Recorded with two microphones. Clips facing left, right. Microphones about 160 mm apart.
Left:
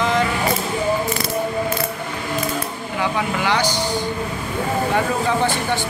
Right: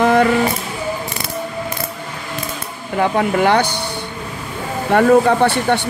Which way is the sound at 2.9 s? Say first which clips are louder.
Right 7 dB; 50° right (ahead or behind).